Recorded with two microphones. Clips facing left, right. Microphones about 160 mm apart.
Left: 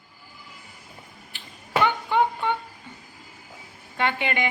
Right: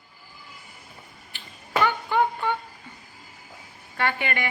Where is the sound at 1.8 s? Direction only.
20° left (ahead or behind).